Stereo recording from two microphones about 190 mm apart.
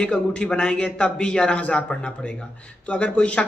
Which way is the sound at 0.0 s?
5° left (ahead or behind).